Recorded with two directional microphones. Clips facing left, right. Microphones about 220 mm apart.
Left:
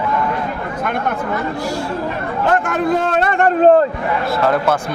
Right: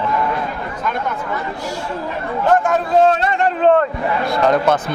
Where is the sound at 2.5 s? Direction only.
65° left (ahead or behind); by 3.8 s 40° left (ahead or behind).